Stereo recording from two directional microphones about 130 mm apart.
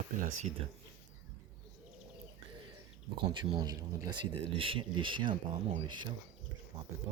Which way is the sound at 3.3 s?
35° right (ahead or behind).